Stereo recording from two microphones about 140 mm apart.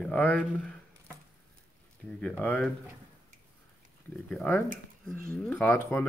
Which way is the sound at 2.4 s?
10° left (ahead or behind).